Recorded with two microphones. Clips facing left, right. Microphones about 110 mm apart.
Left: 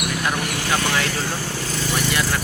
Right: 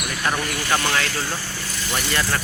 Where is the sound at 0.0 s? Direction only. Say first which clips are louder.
Left 1 dB; 5° left (ahead or behind).